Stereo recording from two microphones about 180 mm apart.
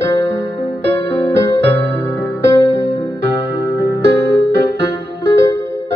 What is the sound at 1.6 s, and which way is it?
Music, 70° right (ahead or behind).